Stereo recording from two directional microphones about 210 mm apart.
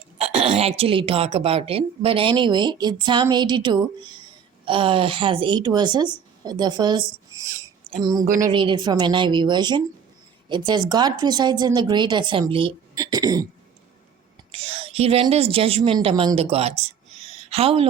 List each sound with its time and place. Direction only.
0.2 s a woman's voice: 30° right (ahead or behind)
14.5 s a woman's voice: 30° right (ahead or behind)